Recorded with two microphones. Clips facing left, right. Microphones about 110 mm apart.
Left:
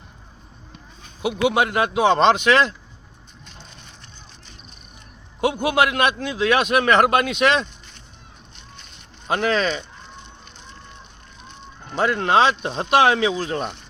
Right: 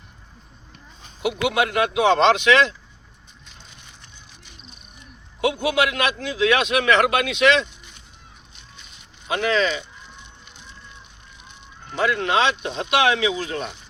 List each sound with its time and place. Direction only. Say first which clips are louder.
1.2 s speech: left 2 dB; 35° left (ahead or behind)
5.4 s a man's voice: left 2 dB; 45° left (ahead or behind)
8.5 s a sound: left 2 dB; 5° right (ahead or behind)
9.2 s a man's voice: left 1 dB; 45° left (ahead or behind)
11.9 s speech: left 3 dB; 40° left (ahead or behind)